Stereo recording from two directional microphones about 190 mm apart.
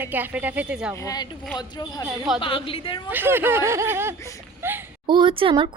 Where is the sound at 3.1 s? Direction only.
10° right (ahead or behind).